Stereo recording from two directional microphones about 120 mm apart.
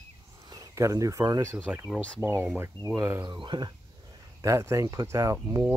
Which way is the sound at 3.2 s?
40° right (ahead or behind).